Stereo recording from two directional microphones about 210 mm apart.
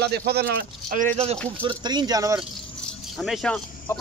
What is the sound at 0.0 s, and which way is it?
Speech, 50° right (ahead or behind).